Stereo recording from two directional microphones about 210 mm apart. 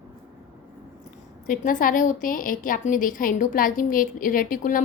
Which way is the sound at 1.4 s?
40° left (ahead or behind).